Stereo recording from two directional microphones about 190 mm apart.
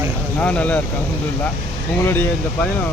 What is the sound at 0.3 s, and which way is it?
Speech, 5° left (ahead or behind).